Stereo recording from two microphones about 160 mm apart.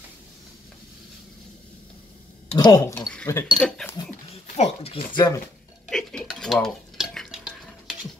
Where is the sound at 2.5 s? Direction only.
25° left (ahead or behind).